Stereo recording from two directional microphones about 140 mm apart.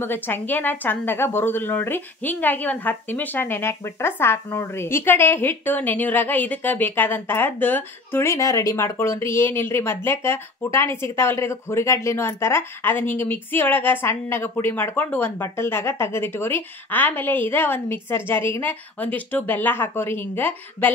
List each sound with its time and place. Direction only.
0.0 s a woman's voice: 15° left (ahead or behind)